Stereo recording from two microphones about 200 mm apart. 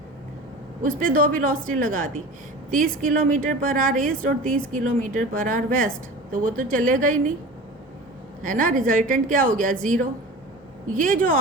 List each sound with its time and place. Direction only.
0.8 s a woman's voice: 40° right (ahead or behind)
8.4 s a woman's voice: 40° right (ahead or behind)
10.9 s a woman's voice: 40° right (ahead or behind)